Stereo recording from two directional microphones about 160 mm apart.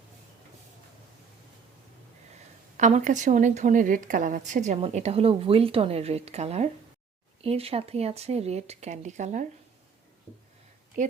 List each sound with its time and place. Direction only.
2.7 s a woman's voice: 50° right (ahead or behind)